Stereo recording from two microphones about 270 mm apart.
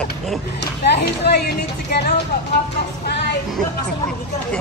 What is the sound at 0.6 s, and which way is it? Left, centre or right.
Speech, left.